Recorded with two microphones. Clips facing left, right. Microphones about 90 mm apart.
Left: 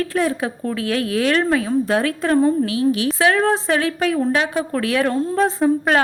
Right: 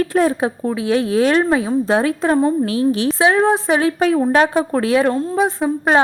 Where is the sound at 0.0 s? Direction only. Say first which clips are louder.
Right 4 dB; 30° right (ahead or behind).